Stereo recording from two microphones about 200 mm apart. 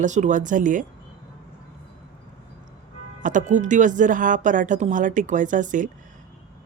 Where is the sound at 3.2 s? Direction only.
40° right (ahead or behind).